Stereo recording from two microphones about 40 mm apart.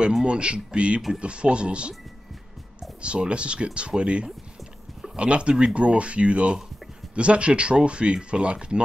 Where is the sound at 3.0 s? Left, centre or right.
Right.